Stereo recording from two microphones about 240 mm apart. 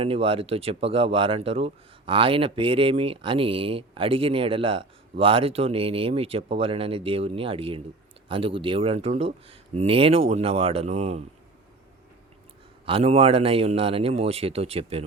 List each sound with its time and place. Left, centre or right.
0.0 s speech: right
12.8 s speech: right